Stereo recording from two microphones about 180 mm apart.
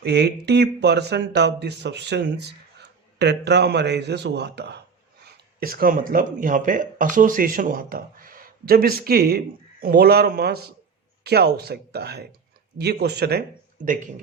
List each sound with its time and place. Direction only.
0.0 s speech: 65° right (ahead or behind)
5.2 s speech: 55° right (ahead or behind)
13.8 s speech: 45° right (ahead or behind)